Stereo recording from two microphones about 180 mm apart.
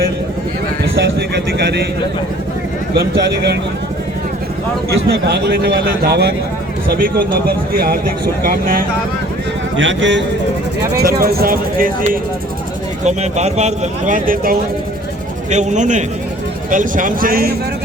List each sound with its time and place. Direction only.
1.5 s a man's voice: 65° right (ahead or behind)
2.9 s a man's voice: 60° right (ahead or behind)
4.9 s a man's voice: 65° right (ahead or behind)
9.7 s a man's voice: 90° right
11.2 s a man's voice: 55° right (ahead or behind)
13.1 s speech: 40° right (ahead or behind)
15.4 s speech: 40° right (ahead or behind)